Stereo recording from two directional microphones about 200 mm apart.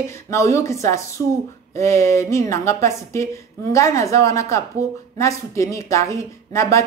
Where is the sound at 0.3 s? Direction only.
15° left (ahead or behind).